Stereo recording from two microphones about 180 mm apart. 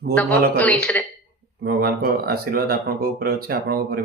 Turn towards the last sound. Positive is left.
turn(degrees=-60)  # may be behind; listen again after turning